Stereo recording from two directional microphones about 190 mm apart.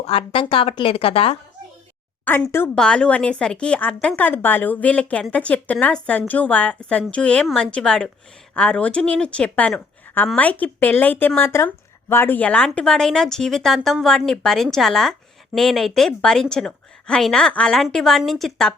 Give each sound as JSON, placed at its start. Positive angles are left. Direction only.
{"t": 0.0, "sound": "a woman's voice", "side_deg": 30}
{"t": 2.2, "sound": "a woman's voice", "side_deg": 10}